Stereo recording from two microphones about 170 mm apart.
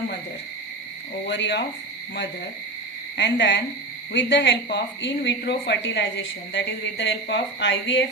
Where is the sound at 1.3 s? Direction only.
90° left.